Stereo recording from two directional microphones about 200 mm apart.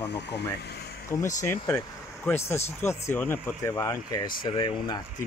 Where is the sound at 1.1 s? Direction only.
15° left (ahead or behind).